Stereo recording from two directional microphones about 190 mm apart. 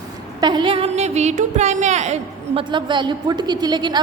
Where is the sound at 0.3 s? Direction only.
25° right (ahead or behind).